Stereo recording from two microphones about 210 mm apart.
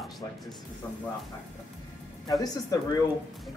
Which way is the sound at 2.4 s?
15° left (ahead or behind).